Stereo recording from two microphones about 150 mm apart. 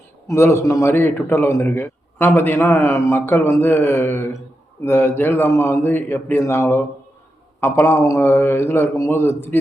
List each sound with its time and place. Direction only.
0.3 s a man's voice: 15° left (ahead or behind)